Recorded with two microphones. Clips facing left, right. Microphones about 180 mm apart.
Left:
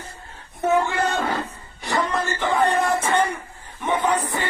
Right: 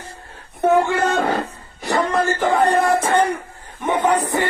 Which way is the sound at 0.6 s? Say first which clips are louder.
Right 4 dB; 65° right (ahead or behind).